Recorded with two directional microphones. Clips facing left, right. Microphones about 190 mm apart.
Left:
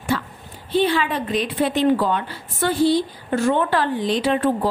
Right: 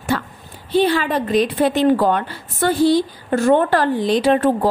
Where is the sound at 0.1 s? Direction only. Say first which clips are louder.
Right 2 dB; 45° right (ahead or behind).